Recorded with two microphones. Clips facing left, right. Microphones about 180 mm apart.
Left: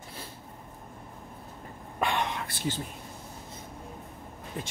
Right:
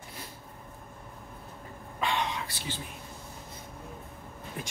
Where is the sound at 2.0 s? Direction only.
55° left (ahead or behind).